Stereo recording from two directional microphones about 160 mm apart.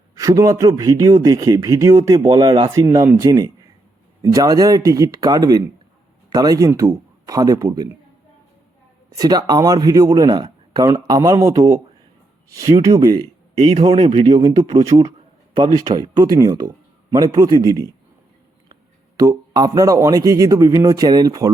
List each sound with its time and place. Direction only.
0.2 s speech: 20° right (ahead or behind)
9.1 s speech: 25° right (ahead or behind)
13.7 s speech: 35° right (ahead or behind)
14.6 s speech: 35° right (ahead or behind)
15.5 s speech: 25° right (ahead or behind)
19.2 s speech: 20° right (ahead or behind)